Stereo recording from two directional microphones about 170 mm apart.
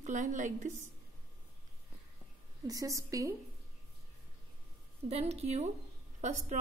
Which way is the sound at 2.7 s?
20° right (ahead or behind).